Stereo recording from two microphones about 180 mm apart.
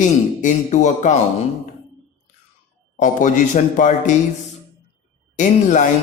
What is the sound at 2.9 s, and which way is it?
Speech, 45° left (ahead or behind).